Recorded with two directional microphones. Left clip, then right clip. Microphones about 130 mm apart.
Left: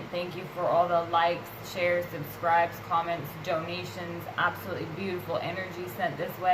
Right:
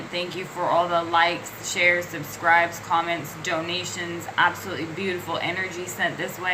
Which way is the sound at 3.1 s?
25° left (ahead or behind).